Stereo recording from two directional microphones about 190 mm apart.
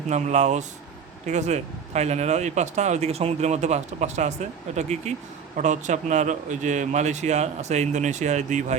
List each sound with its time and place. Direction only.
0.1 s speech: 35° right (ahead or behind)